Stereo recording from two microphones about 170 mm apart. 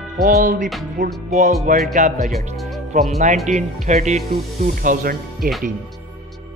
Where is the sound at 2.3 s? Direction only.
Centre (ahead or behind).